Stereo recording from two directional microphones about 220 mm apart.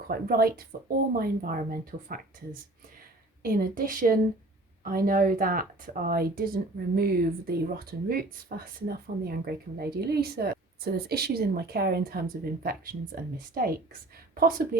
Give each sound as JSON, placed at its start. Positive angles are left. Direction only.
{"t": 0.1, "sound": "speech", "side_deg": -40}
{"t": 3.4, "sound": "speech", "side_deg": -40}